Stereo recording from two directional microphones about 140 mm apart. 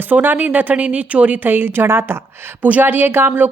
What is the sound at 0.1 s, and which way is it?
A woman's voice, 15° right (ahead or behind).